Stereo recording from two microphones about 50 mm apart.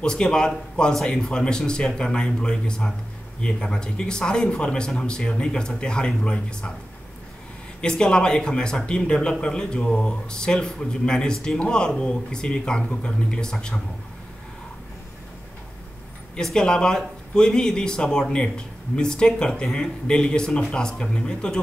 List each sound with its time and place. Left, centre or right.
0.0 s speech: centre
8.0 s speech: centre
16.5 s speech: centre